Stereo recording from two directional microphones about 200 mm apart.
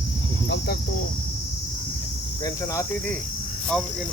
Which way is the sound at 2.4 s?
15° left (ahead or behind).